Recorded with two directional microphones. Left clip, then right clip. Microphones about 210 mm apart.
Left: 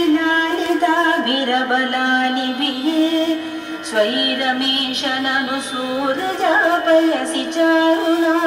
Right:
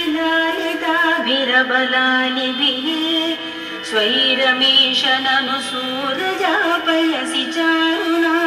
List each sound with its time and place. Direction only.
3.9 s music: 60° left (ahead or behind)
6.4 s music: 55° left (ahead or behind)